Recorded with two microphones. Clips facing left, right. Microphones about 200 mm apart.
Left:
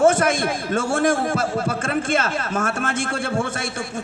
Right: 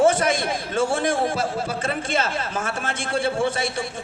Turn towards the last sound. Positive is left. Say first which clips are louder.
# right 2 dB
turn(degrees=50)  # may be behind; listen again after turning